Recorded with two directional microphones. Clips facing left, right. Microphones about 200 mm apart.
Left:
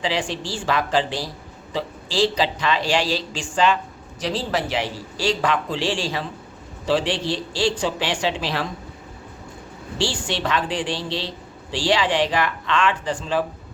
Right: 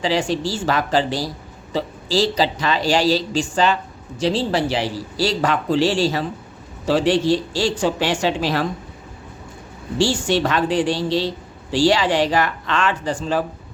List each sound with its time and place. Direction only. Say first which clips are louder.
0.0 s speech: right 5 dB; 40° right (ahead or behind)
4.2 s a woman's voice: right 5 dB; 30° right (ahead or behind); by 8.6 s 45° right (ahead or behind)
10.2 s a woman's voice: right 5 dB; 45° right (ahead or behind)